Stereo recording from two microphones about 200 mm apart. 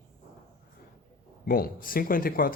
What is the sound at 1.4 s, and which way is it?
Speech, 45° left (ahead or behind).